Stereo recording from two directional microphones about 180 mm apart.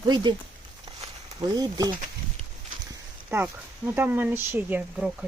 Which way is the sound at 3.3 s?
10° right (ahead or behind).